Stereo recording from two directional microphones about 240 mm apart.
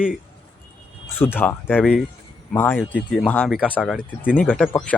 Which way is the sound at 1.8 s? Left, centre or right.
Centre.